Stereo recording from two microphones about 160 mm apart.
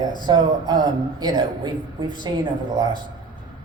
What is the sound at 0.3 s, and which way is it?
Speech, 25° right (ahead or behind).